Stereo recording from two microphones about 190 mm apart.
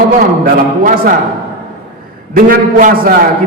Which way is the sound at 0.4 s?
50° right (ahead or behind).